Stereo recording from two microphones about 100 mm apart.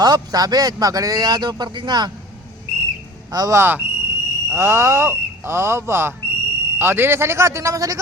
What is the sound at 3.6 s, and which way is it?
Speech, 20° right (ahead or behind).